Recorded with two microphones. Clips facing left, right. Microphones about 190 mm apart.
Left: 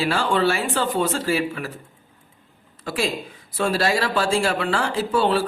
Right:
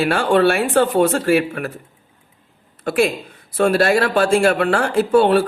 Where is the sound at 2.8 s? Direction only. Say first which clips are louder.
Right 7 dB; 60° right (ahead or behind).